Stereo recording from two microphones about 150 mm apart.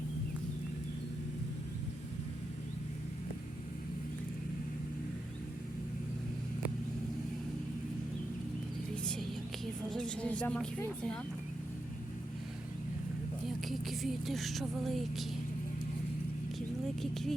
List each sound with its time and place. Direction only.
9.0 s a sound: centre (ahead or behind)
9.9 s a woman's voice: 5° left (ahead or behind)
13.7 s speech: centre (ahead or behind)
16.6 s speech: centre (ahead or behind)